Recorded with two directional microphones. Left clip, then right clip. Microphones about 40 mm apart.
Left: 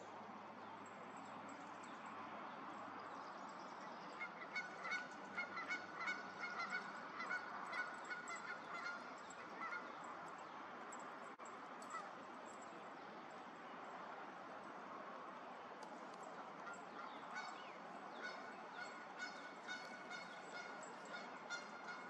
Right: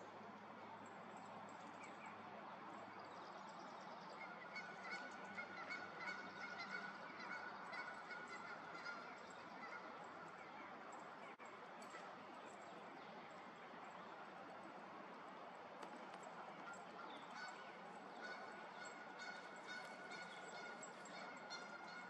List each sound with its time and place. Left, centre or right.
5.7 s honk: left
7.2 s honk: left